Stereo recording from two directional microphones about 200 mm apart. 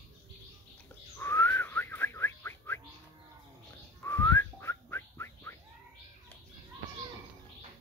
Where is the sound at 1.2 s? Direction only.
10° left (ahead or behind).